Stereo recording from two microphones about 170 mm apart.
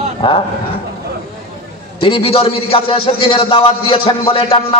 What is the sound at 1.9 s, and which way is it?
A man's voice, 30° left (ahead or behind).